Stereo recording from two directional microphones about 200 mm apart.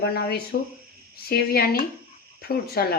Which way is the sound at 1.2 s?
50° left (ahead or behind).